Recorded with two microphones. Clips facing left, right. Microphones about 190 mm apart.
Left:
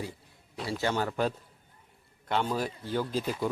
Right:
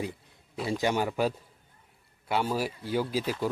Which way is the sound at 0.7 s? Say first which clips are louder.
Right 2 dB; 15° right (ahead or behind).